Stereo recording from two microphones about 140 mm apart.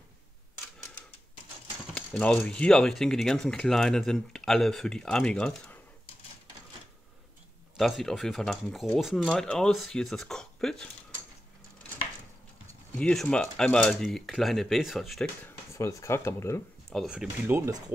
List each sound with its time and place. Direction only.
2.0 s speech: 10° left (ahead or behind)
7.7 s speech: centre (ahead or behind)
12.9 s speech: 5° left (ahead or behind)
15.4 s speech: 20° left (ahead or behind)
16.9 s speech: 5° right (ahead or behind)
17.5 s speech: 25° right (ahead or behind)